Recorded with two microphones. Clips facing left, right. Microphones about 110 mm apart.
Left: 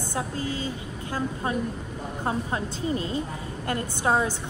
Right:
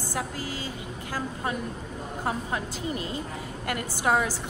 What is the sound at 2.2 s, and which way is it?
A woman's voice, 30° left (ahead or behind).